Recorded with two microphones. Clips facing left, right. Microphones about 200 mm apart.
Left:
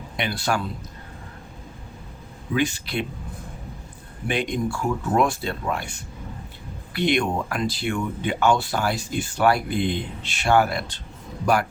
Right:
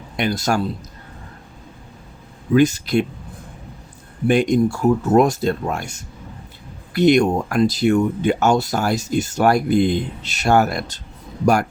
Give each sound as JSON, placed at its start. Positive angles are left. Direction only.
{"t": 0.2, "sound": "a man's voice", "side_deg": -40}
{"t": 2.6, "sound": "speech", "side_deg": -40}
{"t": 4.3, "sound": "speech", "side_deg": -45}